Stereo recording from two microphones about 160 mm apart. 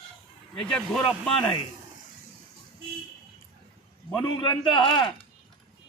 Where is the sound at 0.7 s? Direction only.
Centre (ahead or behind).